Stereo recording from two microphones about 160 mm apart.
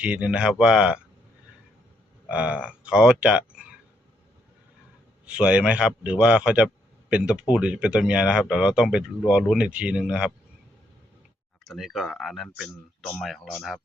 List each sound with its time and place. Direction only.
0.0 s a man's voice: 10° right (ahead or behind)
2.3 s a man's voice: 5° right (ahead or behind)
5.2 s a man's voice: 5° right (ahead or behind)
11.7 s speech: centre (ahead or behind)